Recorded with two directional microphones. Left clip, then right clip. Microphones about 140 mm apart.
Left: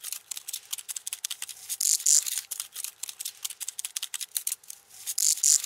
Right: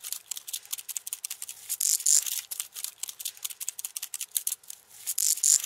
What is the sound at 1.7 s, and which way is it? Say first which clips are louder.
Mechanisms: left 2 dB; centre (ahead or behind).